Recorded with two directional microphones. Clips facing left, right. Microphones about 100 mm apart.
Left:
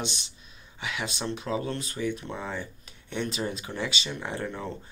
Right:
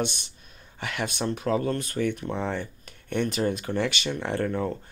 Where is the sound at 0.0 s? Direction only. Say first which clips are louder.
Right 6 dB; 55° right (ahead or behind).